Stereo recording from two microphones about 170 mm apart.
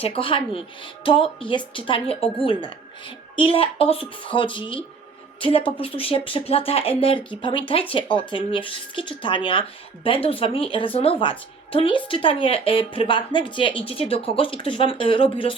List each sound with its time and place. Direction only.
0.0 s speech: 35° left (ahead or behind)